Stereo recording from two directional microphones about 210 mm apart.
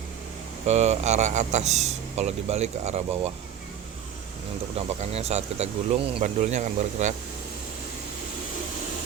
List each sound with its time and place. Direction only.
0.7 s speech: 30° right (ahead or behind)
5.1 s speech: 30° right (ahead or behind)